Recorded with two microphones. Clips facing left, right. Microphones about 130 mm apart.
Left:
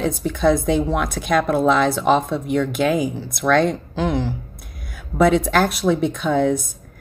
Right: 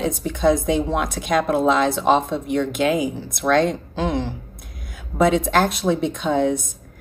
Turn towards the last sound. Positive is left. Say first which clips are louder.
# left 1 dB
turn(degrees=-20)  # may be behind; listen again after turning